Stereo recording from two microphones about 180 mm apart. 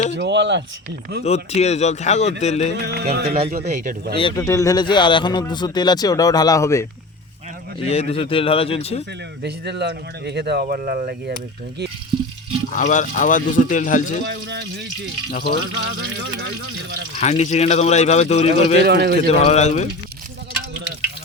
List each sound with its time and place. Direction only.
0.2 s speech: 75° right (ahead or behind)
1.2 s speech: 35° left (ahead or behind)
2.8 s speech: 60° right (ahead or behind)
4.2 s speech: 25° left (ahead or behind)
7.9 s speech: 35° left (ahead or behind)
9.4 s speech: 70° right (ahead or behind)
12.7 s speech: 45° left (ahead or behind)
14.3 s speech: 75° right (ahead or behind)
15.3 s speech: 55° left (ahead or behind)
15.8 s speech: 75° right (ahead or behind)
17.2 s speech: 40° left (ahead or behind)
18.8 s speech: 60° right (ahead or behind)
19.3 s speech: 35° left (ahead or behind)